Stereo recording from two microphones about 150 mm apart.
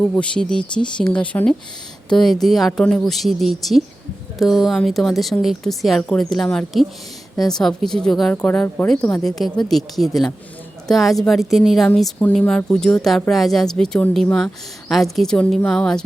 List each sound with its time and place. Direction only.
0.0 s a woman's voice: 5° left (ahead or behind)